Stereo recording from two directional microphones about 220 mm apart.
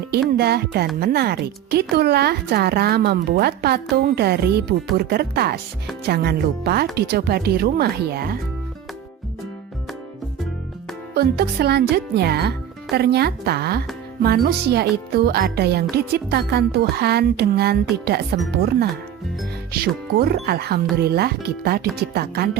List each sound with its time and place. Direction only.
0.1 s speech: 45° right (ahead or behind)
11.1 s speech: 45° right (ahead or behind)
20.1 s speech: 45° right (ahead or behind)